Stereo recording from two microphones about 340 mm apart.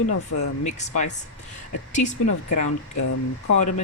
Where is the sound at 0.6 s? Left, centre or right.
Left.